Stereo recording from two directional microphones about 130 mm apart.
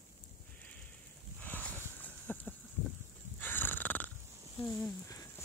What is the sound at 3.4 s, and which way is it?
Snoring, 15° left (ahead or behind).